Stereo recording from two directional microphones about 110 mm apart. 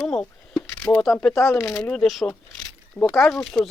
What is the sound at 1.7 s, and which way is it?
Speech, 10° left (ahead or behind).